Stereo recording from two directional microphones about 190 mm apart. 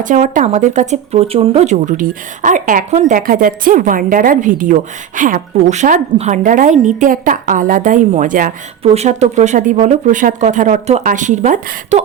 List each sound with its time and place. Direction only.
0.0 s speech: 40° right (ahead or behind)
8.8 s speech: 35° right (ahead or behind)